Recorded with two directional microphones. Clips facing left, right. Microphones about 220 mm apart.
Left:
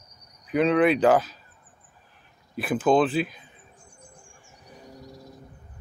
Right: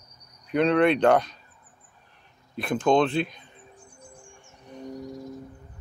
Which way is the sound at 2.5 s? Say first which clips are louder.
Left 1 dB; 5° left (ahead or behind).